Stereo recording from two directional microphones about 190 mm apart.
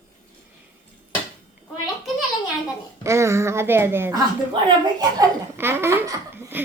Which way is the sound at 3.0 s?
15° right (ahead or behind).